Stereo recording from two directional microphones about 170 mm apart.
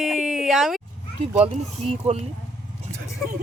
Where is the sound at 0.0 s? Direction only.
Centre (ahead or behind).